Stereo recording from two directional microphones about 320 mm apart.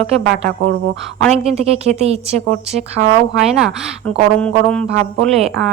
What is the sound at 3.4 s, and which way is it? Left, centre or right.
Speech, centre.